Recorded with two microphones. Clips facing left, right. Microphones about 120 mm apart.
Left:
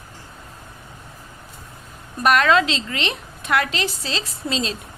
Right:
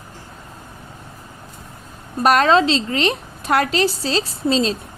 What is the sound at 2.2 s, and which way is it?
A woman's voice, 35° right (ahead or behind).